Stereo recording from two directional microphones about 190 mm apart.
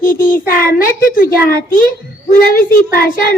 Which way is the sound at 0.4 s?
45° left (ahead or behind).